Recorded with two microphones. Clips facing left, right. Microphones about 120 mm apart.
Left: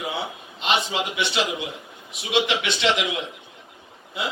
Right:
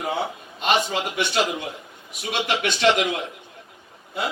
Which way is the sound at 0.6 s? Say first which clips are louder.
Right 2 dB; 50° right (ahead or behind).